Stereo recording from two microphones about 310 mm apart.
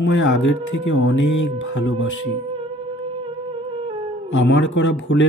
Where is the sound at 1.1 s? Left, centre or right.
Left.